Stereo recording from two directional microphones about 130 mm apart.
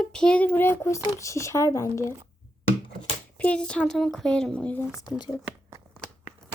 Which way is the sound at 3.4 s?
10° left (ahead or behind).